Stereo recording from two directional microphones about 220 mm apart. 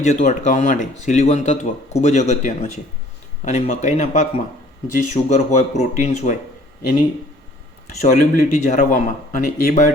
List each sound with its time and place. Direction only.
0.0 s speech: 30° left (ahead or behind)
8.0 s speech: 35° left (ahead or behind)